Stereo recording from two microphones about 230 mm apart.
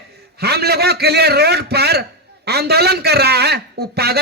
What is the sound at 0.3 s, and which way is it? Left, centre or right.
A man's voice, right.